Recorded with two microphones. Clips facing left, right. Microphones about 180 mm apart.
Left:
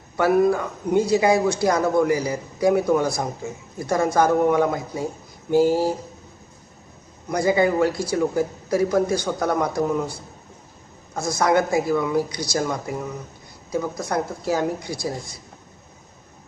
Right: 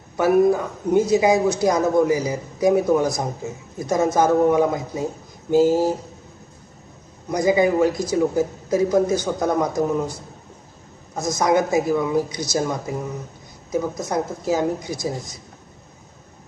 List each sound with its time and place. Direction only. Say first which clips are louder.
0.2 s a woman's voice: right 2 dB; 20° right (ahead or behind)
7.3 s a man's voice: right 2 dB; 15° right (ahead or behind)
11.2 s a man's voice: right 1 dB; 20° right (ahead or behind)